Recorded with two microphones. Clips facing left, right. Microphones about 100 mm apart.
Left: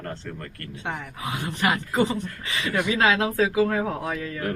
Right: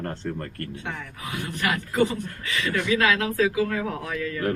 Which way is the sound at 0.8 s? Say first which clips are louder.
Left 3 dB; 20° left (ahead or behind).